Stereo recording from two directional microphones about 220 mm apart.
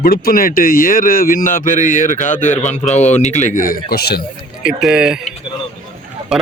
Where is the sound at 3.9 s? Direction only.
45° left (ahead or behind).